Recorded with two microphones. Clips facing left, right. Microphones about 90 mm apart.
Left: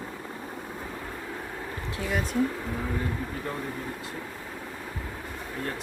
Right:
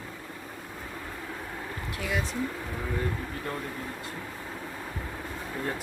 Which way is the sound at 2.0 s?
40° left (ahead or behind).